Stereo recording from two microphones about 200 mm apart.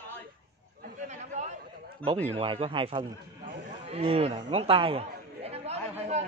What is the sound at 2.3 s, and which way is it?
Speech, 25° right (ahead or behind).